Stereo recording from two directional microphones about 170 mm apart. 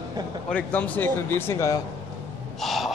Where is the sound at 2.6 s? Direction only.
Centre (ahead or behind).